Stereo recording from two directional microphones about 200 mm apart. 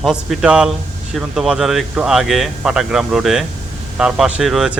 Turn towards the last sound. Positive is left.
turn(degrees=-5)  # may be behind; listen again after turning